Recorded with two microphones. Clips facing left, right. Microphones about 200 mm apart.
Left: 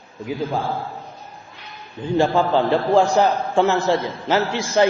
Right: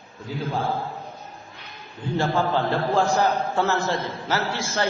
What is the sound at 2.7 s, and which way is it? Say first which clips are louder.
A woman's voice: left 7 dB; 15° left (ahead or behind).